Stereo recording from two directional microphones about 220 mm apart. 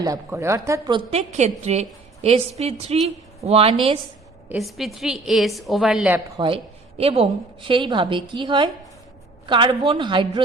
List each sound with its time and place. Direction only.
0.0 s a woman's voice: 15° right (ahead or behind)
4.4 s a woman's voice: centre (ahead or behind)
7.0 s a woman's voice: 25° right (ahead or behind)